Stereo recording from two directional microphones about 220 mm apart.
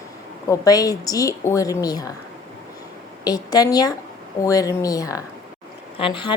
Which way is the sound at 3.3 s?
15° left (ahead or behind).